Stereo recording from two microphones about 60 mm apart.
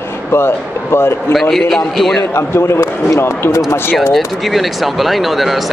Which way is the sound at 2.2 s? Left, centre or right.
Left.